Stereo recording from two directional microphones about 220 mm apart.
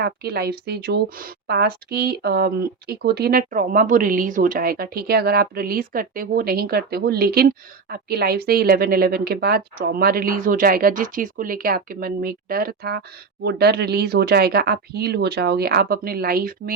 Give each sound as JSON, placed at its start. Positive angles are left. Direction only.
{"t": 0.0, "sound": "speech", "side_deg": -45}